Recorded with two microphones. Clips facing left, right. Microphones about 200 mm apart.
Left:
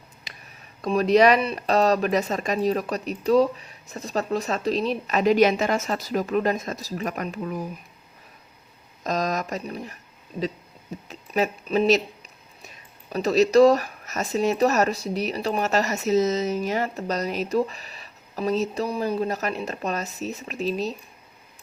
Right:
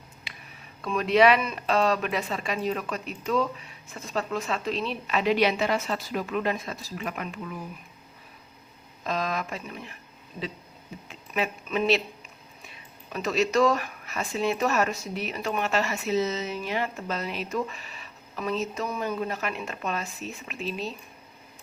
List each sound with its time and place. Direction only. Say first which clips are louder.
0.3 s a sound: left 1 dB; 40° left (ahead or behind)
0.8 s speech: left 4 dB; 40° left (ahead or behind)
9.0 s speech: left 4 dB; 40° left (ahead or behind)
11.1 s speech: left 5 dB; 35° left (ahead or behind)